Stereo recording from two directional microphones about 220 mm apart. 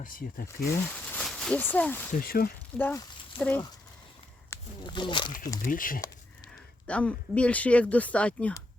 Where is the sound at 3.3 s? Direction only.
25° left (ahead or behind).